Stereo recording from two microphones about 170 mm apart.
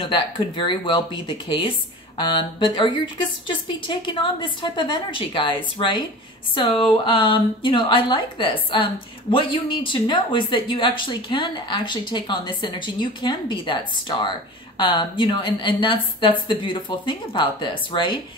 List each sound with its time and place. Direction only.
0.0 s speech: 30° left (ahead or behind)